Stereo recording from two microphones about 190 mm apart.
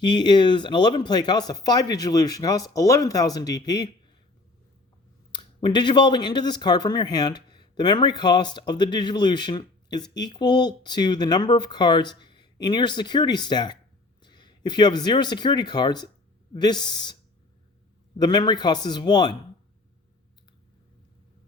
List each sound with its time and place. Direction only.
0.0 s speech: 25° left (ahead or behind)
5.3 s speech: 25° left (ahead or behind)
18.2 s speech: 25° left (ahead or behind)